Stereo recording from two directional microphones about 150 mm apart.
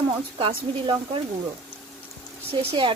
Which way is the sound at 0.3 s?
35° right (ahead or behind).